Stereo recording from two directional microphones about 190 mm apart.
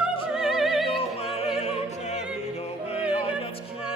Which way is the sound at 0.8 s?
30° left (ahead or behind).